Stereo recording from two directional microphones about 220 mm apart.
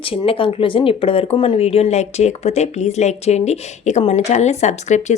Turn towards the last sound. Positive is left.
turn(degrees=30)  # may be behind; listen again after turning